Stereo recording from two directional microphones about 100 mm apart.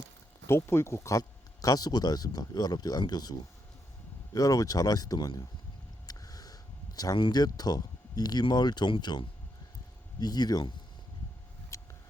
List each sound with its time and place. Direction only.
0.4 s speech: 25° left (ahead or behind)
1.6 s speech: 40° left (ahead or behind)
4.4 s speech: 35° left (ahead or behind)
11.7 s vehicle: 30° left (ahead or behind)